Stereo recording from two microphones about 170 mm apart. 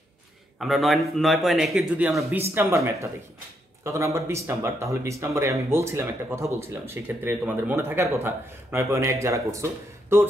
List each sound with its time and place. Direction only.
0.6 s a man's voice: centre (ahead or behind); by 10.2 s 15° right (ahead or behind)